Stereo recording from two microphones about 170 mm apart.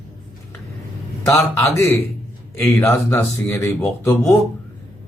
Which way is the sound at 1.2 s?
15° left (ahead or behind).